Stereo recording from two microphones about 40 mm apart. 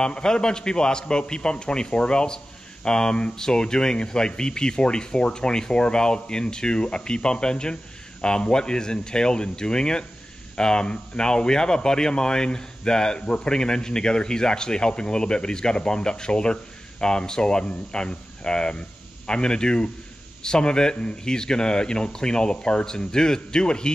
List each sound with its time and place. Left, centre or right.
0.0 s speech: centre